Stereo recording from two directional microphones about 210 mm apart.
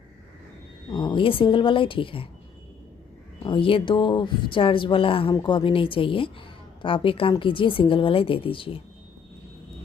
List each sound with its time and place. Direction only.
0.9 s a woman's voice: 20° left (ahead or behind)
3.4 s a woman's voice: 25° left (ahead or behind)